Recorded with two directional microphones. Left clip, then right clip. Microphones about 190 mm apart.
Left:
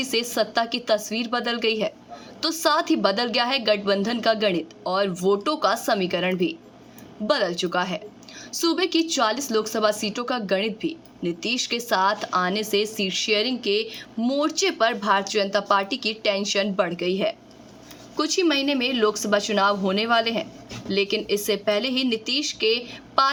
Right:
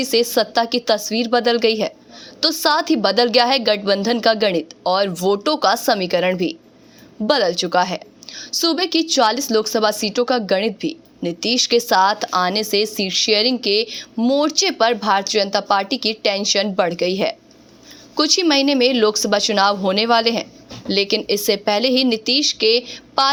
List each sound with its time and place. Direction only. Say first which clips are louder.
0.0 s a woman's voice: right 7 dB; 25° right (ahead or behind)